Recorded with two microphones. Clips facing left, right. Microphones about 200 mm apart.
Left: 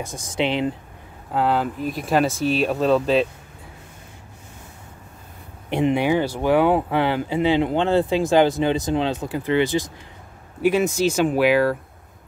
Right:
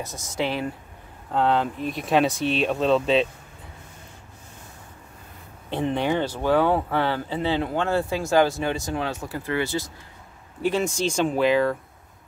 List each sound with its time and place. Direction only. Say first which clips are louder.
0.4 s speech: left 4 dB; 20° left (ahead or behind)
1.3 s speech: left 1 dB; 5° left (ahead or behind)
5.7 s speech: left 5 dB; 15° left (ahead or behind)